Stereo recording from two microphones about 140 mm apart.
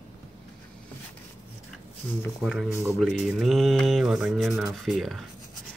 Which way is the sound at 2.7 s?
20° right (ahead or behind).